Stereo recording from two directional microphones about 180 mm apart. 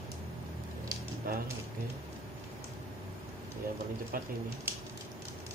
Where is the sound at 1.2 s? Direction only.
55° right (ahead or behind).